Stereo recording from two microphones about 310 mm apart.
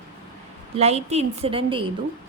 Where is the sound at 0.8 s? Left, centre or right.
Right.